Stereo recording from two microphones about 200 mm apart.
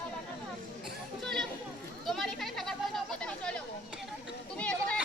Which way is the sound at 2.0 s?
Centre (ahead or behind).